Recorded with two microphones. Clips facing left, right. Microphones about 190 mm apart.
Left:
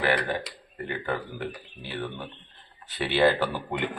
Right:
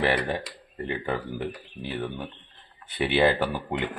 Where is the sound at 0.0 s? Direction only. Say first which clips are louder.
Right 1 dB; 25° right (ahead or behind).